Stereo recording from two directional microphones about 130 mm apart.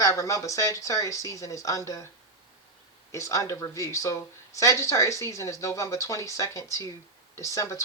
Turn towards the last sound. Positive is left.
turn(degrees=25)  # may be behind; listen again after turning